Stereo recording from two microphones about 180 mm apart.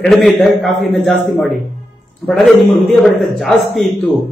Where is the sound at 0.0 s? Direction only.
5° left (ahead or behind).